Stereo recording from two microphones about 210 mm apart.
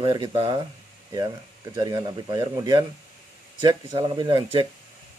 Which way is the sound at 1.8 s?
20° right (ahead or behind).